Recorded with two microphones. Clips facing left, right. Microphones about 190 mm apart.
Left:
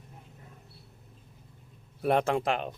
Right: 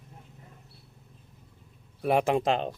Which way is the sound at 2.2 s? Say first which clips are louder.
Right 3 dB; 20° right (ahead or behind).